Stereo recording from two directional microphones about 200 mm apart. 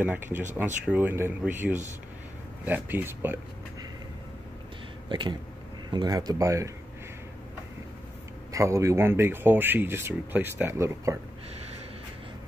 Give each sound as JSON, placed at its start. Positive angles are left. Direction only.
{"t": 0.0, "sound": "speech", "side_deg": -10}
{"t": 5.9, "sound": "speech", "side_deg": -20}
{"t": 8.5, "sound": "speech", "side_deg": -15}